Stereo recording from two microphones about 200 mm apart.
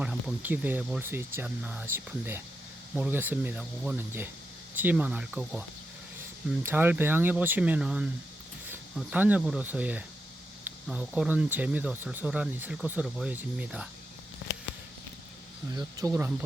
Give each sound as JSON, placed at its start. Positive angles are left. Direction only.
{"t": 0.0, "sound": "speech", "side_deg": -5}
{"t": 15.7, "sound": "speech", "side_deg": -15}